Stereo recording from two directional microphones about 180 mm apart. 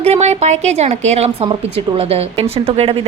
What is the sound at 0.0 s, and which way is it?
A woman's voice, 35° right (ahead or behind).